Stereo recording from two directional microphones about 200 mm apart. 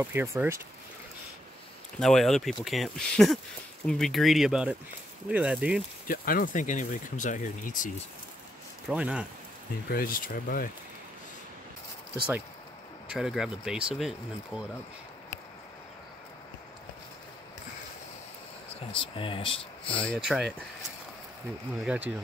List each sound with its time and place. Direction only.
0.0 s speech: 10° right (ahead or behind)
2.0 s speech: centre (ahead or behind)
6.0 s speech: 45° left (ahead or behind)
8.8 s speech: 5° right (ahead or behind)
9.8 s speech: 45° left (ahead or behind)
13.1 s speech: centre (ahead or behind)
18.9 s speech: 25° left (ahead or behind)
20.2 s speech: 5° right (ahead or behind)
21.7 s speech: 5° right (ahead or behind)